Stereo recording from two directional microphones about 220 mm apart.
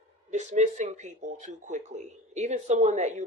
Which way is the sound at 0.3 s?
35° right (ahead or behind).